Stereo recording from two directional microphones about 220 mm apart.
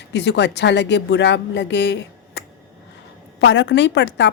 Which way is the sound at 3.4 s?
55° left (ahead or behind).